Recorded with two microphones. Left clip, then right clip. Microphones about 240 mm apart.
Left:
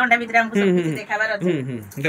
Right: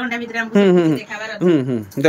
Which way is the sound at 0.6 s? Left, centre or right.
Centre.